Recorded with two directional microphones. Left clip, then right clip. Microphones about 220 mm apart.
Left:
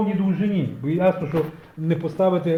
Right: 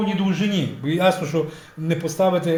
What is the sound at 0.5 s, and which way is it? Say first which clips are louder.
A man's voice: right 2 dB; 10° left (ahead or behind).